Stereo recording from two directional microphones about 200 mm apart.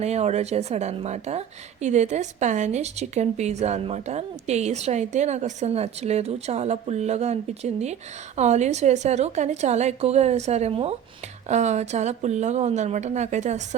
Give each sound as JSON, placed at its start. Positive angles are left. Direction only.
{"t": 0.0, "sound": "a woman's voice", "side_deg": -35}